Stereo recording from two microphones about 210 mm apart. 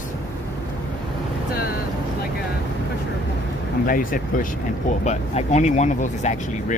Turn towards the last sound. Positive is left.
turn(degrees=35)  # may be behind; listen again after turning